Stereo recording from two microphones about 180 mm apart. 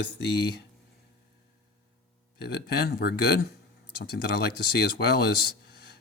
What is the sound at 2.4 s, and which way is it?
Speech, 60° left (ahead or behind).